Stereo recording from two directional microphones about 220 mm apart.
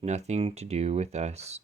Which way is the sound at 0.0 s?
30° right (ahead or behind).